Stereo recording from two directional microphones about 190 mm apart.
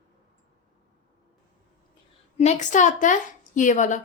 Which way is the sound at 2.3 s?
35° left (ahead or behind).